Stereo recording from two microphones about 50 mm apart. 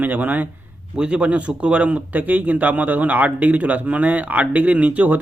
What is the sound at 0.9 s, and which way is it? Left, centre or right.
Speech, right.